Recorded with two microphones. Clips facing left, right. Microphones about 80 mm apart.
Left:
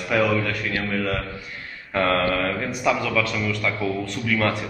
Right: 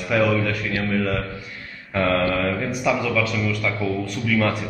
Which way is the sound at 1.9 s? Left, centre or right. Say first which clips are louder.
Even; centre.